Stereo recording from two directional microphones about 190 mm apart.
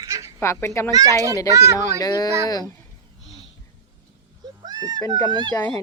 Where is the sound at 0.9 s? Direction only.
20° right (ahead or behind).